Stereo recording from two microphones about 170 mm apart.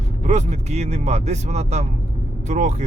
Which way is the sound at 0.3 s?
40° right (ahead or behind).